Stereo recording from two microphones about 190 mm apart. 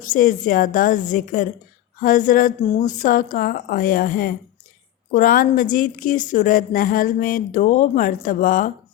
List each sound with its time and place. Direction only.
0.1 s a woman's voice: 45° left (ahead or behind)